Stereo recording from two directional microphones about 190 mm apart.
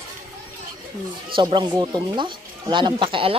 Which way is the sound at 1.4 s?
25° right (ahead or behind).